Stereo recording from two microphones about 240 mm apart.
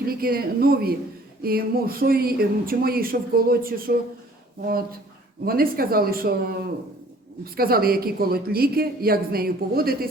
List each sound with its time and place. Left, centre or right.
0.1 s speech: right